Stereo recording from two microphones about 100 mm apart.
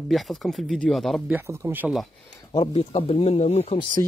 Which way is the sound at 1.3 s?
30° right (ahead or behind).